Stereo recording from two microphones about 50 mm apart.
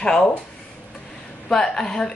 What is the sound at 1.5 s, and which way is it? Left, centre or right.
Speech, centre.